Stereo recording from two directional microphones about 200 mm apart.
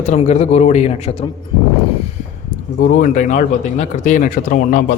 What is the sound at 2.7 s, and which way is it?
Speech, 40° left (ahead or behind).